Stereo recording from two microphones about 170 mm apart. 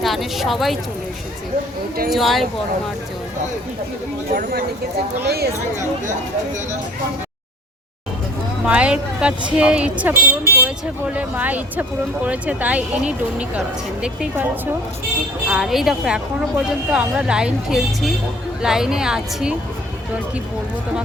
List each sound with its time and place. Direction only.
0.0 s a woman's voice: centre (ahead or behind)
2.0 s a woman's voice: centre (ahead or behind)
5.2 s speech: 70° right (ahead or behind)
8.6 s a woman's voice: 5° right (ahead or behind)